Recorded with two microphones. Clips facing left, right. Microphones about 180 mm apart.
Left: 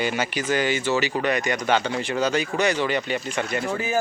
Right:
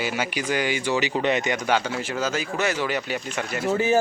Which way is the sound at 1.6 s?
5° right (ahead or behind).